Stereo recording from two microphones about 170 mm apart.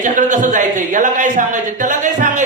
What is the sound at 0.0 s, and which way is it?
Speech, 45° right (ahead or behind).